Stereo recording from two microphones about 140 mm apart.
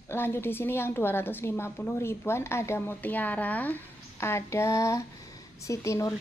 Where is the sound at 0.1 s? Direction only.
15° left (ahead or behind).